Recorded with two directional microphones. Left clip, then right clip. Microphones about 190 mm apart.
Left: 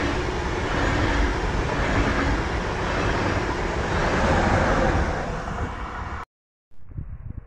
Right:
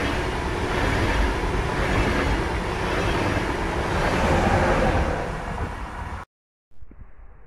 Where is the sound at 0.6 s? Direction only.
65° right (ahead or behind).